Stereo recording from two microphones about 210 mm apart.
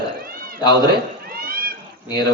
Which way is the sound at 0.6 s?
20° left (ahead or behind).